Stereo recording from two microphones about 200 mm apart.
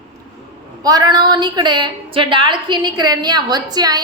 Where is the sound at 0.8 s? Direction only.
20° right (ahead or behind).